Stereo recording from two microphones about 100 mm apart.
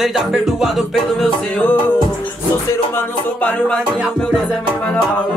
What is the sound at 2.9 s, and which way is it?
Music, 15° left (ahead or behind).